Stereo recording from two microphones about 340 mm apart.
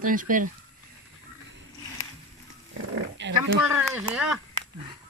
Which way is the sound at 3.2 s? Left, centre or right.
Right.